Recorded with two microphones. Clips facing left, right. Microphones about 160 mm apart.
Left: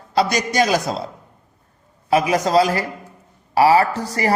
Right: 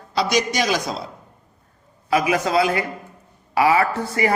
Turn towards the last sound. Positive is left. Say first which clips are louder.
# left 1 dB
turn(degrees=35)  # may be behind; listen again after turning